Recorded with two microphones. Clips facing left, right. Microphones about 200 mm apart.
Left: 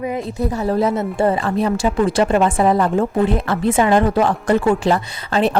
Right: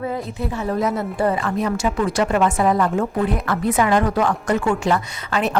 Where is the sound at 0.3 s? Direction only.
40° left (ahead or behind).